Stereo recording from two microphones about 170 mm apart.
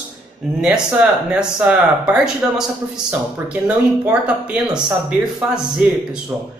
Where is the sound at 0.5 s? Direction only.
5° right (ahead or behind).